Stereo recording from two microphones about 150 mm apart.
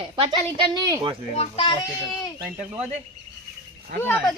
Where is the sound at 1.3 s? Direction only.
40° left (ahead or behind).